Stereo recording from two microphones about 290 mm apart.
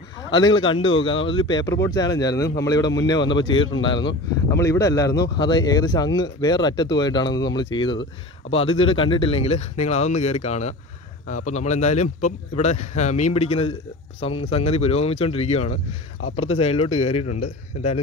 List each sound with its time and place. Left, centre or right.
0.3 s a man's voice: centre